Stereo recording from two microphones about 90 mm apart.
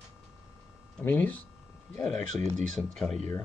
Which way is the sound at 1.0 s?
20° left (ahead or behind).